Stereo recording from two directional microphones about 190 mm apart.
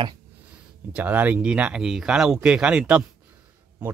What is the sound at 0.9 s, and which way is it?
Speech, 10° right (ahead or behind).